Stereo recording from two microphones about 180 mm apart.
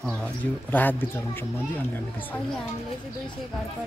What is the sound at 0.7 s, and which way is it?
Speech, 10° left (ahead or behind).